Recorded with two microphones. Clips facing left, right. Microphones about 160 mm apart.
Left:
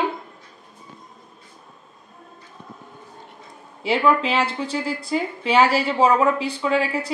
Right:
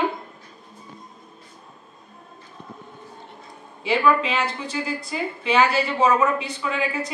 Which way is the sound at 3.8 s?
30° left (ahead or behind).